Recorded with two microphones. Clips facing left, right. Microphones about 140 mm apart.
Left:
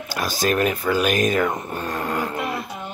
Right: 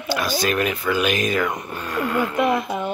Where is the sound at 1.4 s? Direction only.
25° left (ahead or behind).